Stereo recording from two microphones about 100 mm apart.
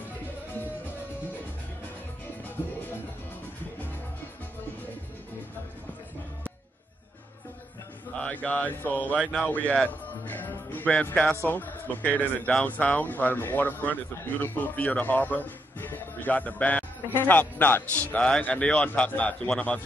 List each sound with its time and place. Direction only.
8.2 s speech: 15° left (ahead or behind)
10.2 s music: 15° left (ahead or behind)
11.4 s speech: 20° left (ahead or behind)